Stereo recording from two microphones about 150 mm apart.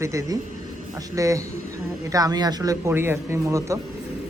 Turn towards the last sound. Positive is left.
turn(degrees=-20)  # may be behind; listen again after turning